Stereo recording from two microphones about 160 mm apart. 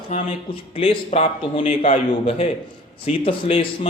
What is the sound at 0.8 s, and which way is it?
Speech, 35° left (ahead or behind).